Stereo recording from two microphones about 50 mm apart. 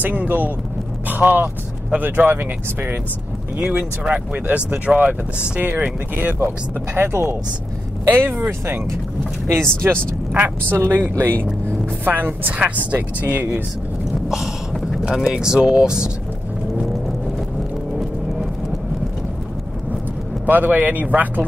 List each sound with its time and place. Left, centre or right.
0.0 s speech: right
4.5 s speech: right
7.0 s a woman's voice: right
10.3 s a woman's voice: right
14.3 s speech: centre
20.4 s speech: right